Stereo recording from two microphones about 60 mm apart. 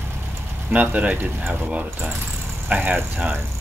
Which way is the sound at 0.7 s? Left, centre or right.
Right.